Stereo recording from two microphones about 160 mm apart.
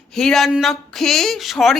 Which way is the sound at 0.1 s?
5° left (ahead or behind).